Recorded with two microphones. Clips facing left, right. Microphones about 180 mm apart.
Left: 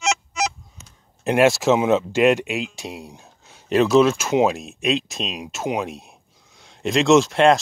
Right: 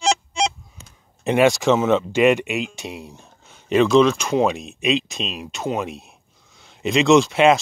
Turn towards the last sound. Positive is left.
turn(degrees=0)  # may be behind; listen again after turning